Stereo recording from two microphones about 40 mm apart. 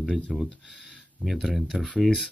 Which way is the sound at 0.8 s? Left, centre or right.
Right.